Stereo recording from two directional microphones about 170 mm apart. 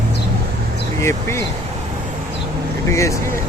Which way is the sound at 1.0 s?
15° left (ahead or behind).